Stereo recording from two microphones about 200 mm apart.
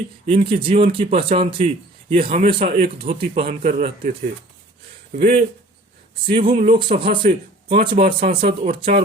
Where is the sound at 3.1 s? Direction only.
50° right (ahead or behind).